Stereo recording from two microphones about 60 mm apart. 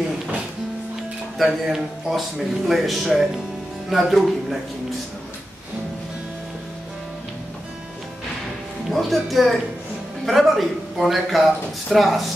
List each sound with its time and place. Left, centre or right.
1.4 s a man's voice: centre
8.8 s a man's voice: centre